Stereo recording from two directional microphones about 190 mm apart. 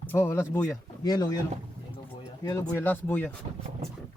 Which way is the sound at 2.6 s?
10° left (ahead or behind).